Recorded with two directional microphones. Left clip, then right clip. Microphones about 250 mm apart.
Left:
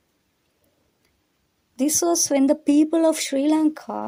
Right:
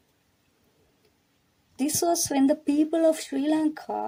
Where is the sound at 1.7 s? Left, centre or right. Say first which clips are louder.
Left 4 dB; centre.